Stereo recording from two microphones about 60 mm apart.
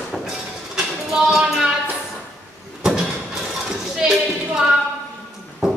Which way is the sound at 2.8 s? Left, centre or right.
Centre.